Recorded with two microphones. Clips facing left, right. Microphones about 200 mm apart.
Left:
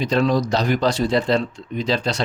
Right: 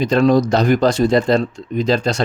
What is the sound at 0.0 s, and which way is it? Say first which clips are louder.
Speech: right 5 dB; 50° right (ahead or behind).